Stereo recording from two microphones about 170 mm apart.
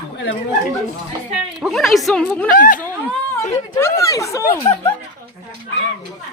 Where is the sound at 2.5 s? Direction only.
55° left (ahead or behind).